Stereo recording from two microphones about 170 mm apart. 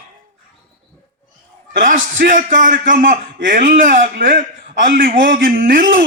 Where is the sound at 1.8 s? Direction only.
50° right (ahead or behind).